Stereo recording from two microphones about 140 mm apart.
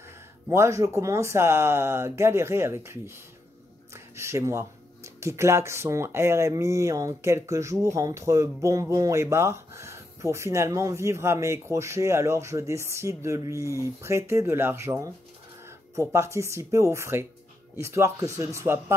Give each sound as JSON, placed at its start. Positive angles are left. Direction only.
{"t": 0.5, "sound": "speech", "side_deg": -20}